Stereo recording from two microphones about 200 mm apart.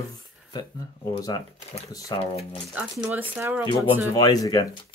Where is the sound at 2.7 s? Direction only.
5° right (ahead or behind).